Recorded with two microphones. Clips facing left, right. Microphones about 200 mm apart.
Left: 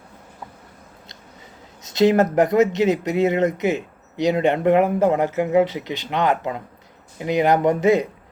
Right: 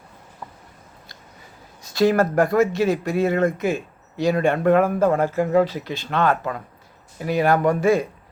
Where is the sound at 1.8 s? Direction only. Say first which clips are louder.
Left 2 dB; 20° left (ahead or behind).